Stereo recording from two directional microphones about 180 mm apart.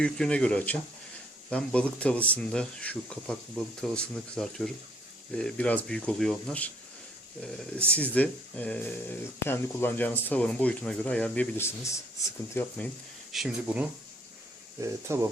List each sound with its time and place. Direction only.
0.0 s speech: 5° left (ahead or behind)
7.9 s speech: 10° left (ahead or behind)
13.3 s speech: 5° right (ahead or behind)
14.8 s speech: 15° right (ahead or behind)